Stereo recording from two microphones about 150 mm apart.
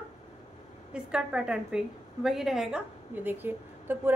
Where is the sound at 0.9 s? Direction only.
5° right (ahead or behind).